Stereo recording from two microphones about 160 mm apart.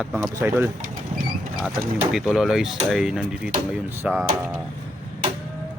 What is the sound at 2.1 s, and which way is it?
Speech, 5° right (ahead or behind).